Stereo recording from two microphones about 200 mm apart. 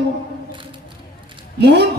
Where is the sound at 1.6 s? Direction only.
60° right (ahead or behind).